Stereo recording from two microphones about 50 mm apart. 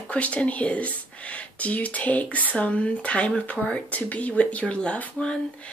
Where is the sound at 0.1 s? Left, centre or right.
Left.